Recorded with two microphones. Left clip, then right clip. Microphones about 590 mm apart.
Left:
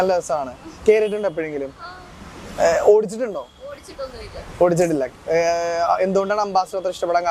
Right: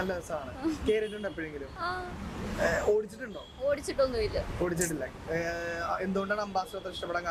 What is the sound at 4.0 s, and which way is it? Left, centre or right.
Speech, right.